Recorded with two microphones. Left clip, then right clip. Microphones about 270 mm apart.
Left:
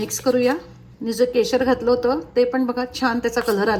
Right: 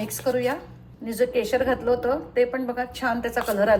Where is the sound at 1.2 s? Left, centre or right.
Left.